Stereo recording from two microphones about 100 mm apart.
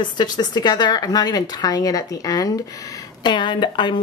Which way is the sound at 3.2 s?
50° left (ahead or behind).